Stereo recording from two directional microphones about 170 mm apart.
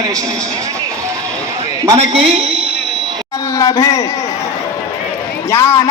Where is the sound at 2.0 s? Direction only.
35° right (ahead or behind).